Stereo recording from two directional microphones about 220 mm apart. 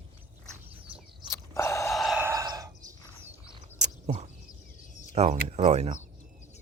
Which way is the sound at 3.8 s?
30° right (ahead or behind).